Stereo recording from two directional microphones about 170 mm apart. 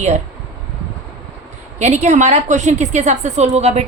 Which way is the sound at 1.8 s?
45° right (ahead or behind).